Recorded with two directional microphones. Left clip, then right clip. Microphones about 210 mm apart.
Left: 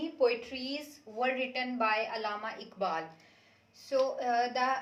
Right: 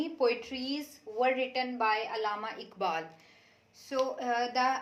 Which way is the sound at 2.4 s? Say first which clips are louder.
Right 1 dB; 45° right (ahead or behind).